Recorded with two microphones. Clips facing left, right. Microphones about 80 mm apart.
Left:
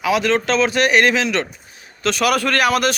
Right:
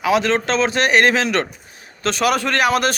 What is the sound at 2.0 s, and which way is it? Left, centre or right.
Speech, right.